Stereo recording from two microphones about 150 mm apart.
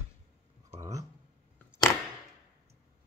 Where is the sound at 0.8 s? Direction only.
20° right (ahead or behind).